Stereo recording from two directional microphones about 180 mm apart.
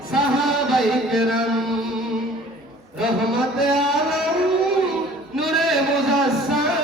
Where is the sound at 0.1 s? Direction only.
Centre (ahead or behind).